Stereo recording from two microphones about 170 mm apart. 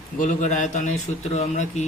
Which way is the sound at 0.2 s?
45° left (ahead or behind).